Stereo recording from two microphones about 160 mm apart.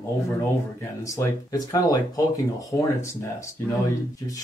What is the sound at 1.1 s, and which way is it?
Speech, 20° left (ahead or behind).